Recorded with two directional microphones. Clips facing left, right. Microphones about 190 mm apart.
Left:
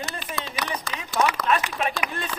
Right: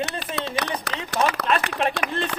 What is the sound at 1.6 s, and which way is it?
Speech, 60° right (ahead or behind).